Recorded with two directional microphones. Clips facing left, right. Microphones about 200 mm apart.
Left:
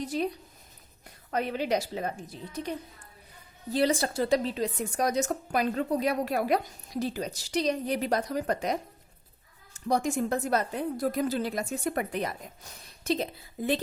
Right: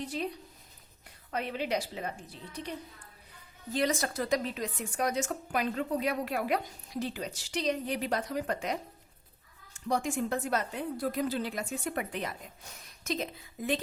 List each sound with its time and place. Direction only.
1.3 s a woman's voice: 45° left (ahead or behind)
3.7 s a woman's voice: 30° left (ahead or behind)